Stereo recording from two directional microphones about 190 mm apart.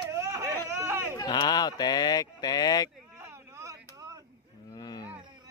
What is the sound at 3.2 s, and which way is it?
Vehicle, 15° right (ahead or behind).